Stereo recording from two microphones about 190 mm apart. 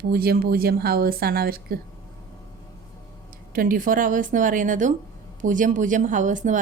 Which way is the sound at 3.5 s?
45° right (ahead or behind).